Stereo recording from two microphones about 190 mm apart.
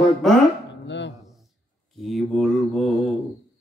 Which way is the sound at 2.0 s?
Centre (ahead or behind).